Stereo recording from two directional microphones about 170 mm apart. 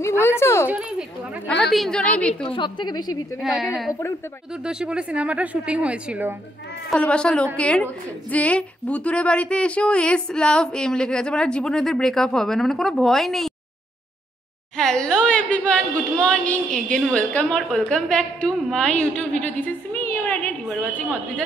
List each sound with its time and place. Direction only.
0.2 s speech: 15° left (ahead or behind)
0.7 s a woman's voice: 5° right (ahead or behind)
2.4 s a woman's voice: 30° left (ahead or behind)
3.3 s a woman's voice: centre (ahead or behind)
6.9 s a woman's voice: 5° left (ahead or behind)
14.8 s speech: 5° left (ahead or behind)
20.6 s a woman's voice: centre (ahead or behind)